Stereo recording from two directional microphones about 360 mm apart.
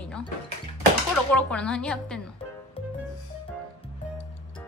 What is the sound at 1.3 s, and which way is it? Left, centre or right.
Speech, centre.